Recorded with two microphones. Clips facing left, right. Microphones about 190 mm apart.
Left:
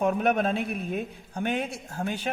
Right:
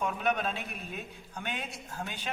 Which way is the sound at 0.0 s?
50° left (ahead or behind).